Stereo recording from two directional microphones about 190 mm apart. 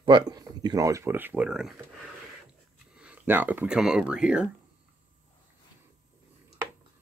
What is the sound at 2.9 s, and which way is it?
Speech, 5° right (ahead or behind).